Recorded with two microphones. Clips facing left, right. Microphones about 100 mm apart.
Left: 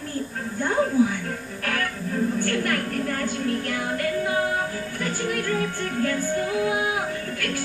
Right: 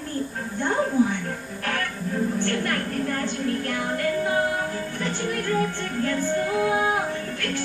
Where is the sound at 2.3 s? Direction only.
25° right (ahead or behind).